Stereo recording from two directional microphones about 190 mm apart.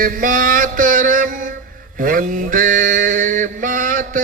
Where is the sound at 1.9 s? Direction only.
45° right (ahead or behind).